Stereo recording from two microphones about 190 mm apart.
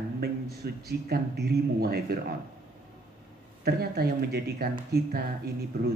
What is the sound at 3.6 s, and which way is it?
Speech, 55° right (ahead or behind).